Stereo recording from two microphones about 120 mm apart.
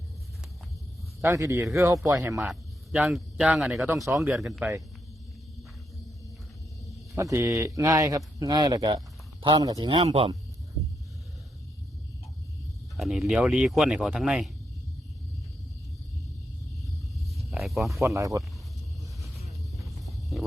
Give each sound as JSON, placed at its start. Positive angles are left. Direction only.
{"t": 1.2, "sound": "speech", "side_deg": -25}
{"t": 2.4, "sound": "speech", "side_deg": -5}
{"t": 7.2, "sound": "speech", "side_deg": -25}
{"t": 9.9, "sound": "speech", "side_deg": -55}
{"t": 13.0, "sound": "speech", "side_deg": 0}
{"t": 17.3, "sound": "snake", "side_deg": 0}
{"t": 18.0, "sound": "speech", "side_deg": -25}
{"t": 20.4, "sound": "a sound", "side_deg": 0}